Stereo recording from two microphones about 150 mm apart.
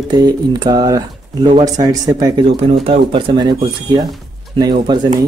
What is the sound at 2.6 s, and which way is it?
Speech, 40° right (ahead or behind).